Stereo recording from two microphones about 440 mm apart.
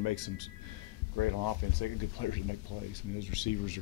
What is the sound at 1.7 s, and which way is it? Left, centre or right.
Speech, left.